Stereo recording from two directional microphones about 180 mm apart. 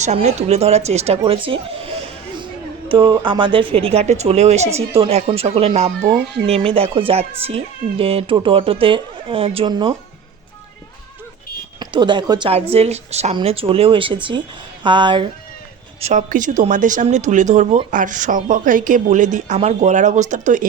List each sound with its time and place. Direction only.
0.0 s speech: 40° right (ahead or behind)
2.9 s speech: 30° right (ahead or behind)
11.8 s speech: 25° right (ahead or behind)
16.0 s speech: 40° right (ahead or behind)